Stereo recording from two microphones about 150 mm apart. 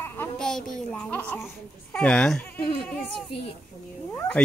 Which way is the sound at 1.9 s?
10° left (ahead or behind).